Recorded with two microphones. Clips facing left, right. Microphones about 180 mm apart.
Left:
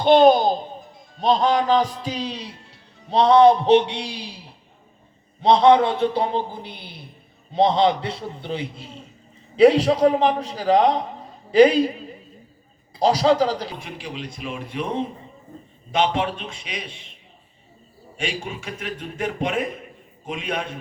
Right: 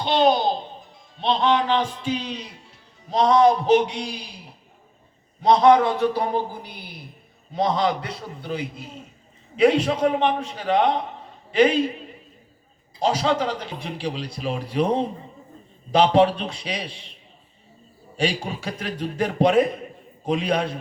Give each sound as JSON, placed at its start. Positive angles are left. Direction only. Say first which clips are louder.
{"t": 0.0, "sound": "a child's voice", "louder": "left 5 dB", "side_deg": 50}
{"t": 13.7, "sound": "a man's voice", "louder": "right 4 dB", "side_deg": -35}
{"t": 18.2, "sound": "a man's voice", "louder": "right 4 dB", "side_deg": -35}